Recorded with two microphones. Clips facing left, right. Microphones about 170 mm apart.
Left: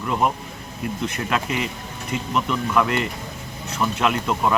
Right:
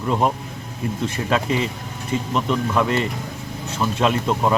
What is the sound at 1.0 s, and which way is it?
Speech, 30° right (ahead or behind).